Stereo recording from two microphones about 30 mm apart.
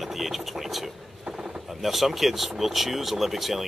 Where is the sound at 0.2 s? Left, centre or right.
Centre.